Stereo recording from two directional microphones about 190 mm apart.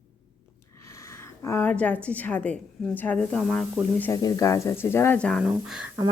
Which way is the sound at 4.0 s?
15° left (ahead or behind).